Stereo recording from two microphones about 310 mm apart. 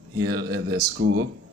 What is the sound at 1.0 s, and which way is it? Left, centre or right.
Speech, right.